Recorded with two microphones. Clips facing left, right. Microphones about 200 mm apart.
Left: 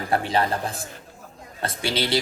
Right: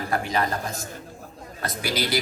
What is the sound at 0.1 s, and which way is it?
A man's voice, 30° left (ahead or behind).